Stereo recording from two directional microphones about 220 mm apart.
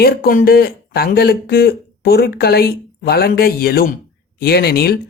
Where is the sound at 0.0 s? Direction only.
40° left (ahead or behind).